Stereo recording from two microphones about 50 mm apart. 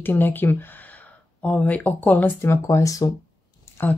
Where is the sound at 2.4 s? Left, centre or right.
Left.